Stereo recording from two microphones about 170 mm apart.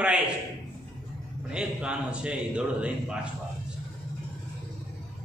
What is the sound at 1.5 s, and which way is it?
A man's voice, 5° right (ahead or behind).